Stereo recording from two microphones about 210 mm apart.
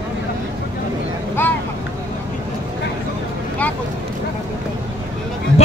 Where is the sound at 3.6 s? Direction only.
5° left (ahead or behind).